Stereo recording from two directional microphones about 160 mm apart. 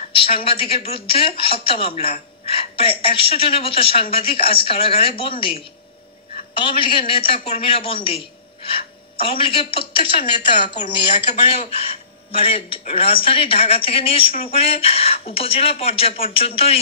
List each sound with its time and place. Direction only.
0.1 s a woman's voice: 35° left (ahead or behind)